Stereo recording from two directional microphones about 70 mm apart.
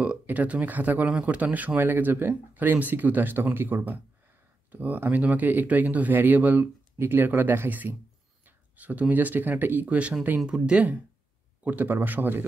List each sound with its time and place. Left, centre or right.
0.0 s speech: right